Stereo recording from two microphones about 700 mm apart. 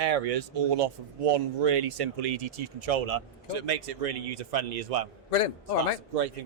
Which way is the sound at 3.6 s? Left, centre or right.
Right.